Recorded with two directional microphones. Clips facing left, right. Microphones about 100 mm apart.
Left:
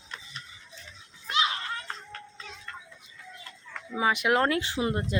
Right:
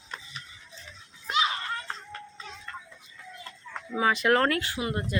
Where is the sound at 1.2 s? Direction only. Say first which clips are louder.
Right 1 dB; 10° right (ahead or behind).